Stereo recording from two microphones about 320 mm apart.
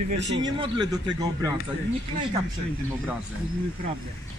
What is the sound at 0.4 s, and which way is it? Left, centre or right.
Speech, centre.